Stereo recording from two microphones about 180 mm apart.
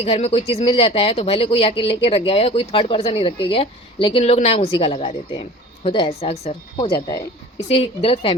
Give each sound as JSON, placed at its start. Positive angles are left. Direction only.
{"t": 0.0, "sound": "speech", "side_deg": 35}